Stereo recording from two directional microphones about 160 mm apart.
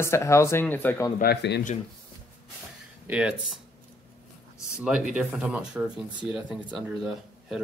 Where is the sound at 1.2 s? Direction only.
90° left.